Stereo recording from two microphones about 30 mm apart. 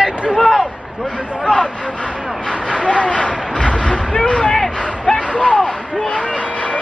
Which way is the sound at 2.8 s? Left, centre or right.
Left.